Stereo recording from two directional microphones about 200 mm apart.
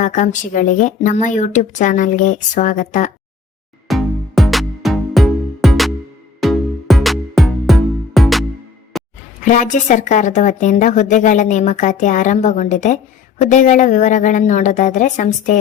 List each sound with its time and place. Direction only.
0.0 s a woman's voice: 40° left (ahead or behind)
3.8 s music: centre (ahead or behind)
9.4 s a woman's voice: 40° left (ahead or behind)